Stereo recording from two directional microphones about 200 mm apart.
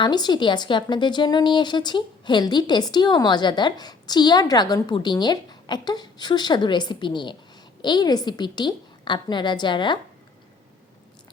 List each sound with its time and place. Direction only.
0.0 s a woman's voice: 20° left (ahead or behind)